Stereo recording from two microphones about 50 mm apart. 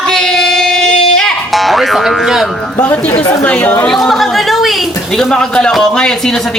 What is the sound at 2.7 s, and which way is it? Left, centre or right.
A woman's voice, left.